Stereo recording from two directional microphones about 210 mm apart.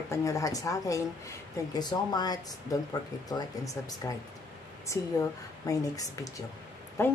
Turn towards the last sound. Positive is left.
turn(degrees=10)  # may be behind; listen again after turning